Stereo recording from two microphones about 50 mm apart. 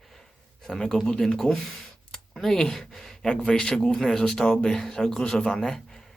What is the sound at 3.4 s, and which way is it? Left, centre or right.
Speech, centre.